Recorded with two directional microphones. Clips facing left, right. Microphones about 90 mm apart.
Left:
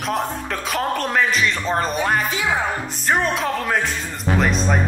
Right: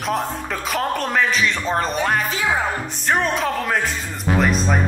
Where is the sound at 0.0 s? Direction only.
Centre (ahead or behind).